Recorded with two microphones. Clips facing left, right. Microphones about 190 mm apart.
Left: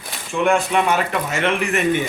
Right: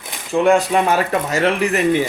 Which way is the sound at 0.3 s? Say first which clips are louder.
Right 4 dB; 35° right (ahead or behind).